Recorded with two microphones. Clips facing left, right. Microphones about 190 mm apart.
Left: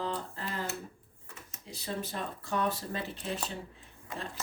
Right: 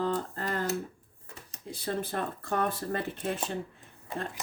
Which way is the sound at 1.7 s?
55° right (ahead or behind).